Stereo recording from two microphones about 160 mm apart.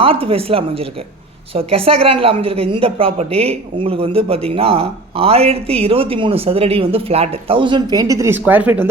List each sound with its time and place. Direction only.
0.0 s a woman's voice: 35° right (ahead or behind); by 8.9 s 10° right (ahead or behind)